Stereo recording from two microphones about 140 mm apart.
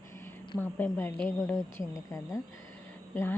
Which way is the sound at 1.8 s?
25° left (ahead or behind).